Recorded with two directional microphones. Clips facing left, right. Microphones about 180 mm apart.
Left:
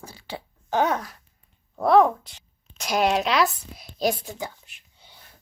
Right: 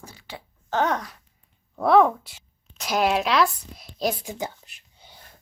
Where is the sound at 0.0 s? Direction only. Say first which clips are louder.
Left 4 dB; 30° left (ahead or behind).